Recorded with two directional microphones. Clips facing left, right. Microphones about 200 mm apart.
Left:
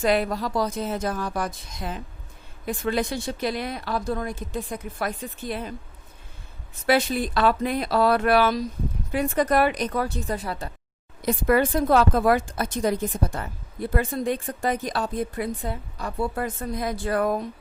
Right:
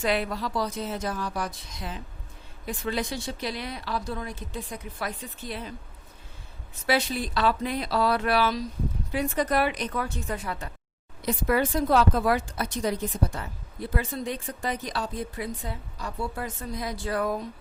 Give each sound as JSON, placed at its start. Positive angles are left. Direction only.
{"t": 0.0, "sound": "a woman's voice", "side_deg": 45}
{"t": 6.8, "sound": "a woman's voice", "side_deg": 50}
{"t": 11.2, "sound": "a woman's voice", "side_deg": 50}